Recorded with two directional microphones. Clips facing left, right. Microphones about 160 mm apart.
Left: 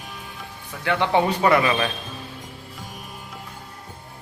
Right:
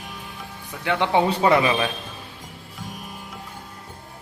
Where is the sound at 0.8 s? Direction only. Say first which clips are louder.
Even; 15° right (ahead or behind).